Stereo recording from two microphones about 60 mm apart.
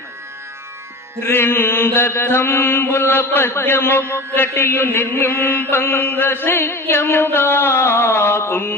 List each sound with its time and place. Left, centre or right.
1.2 s chant: left